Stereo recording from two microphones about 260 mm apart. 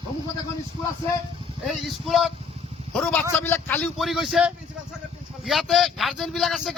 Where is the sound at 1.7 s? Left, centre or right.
Centre.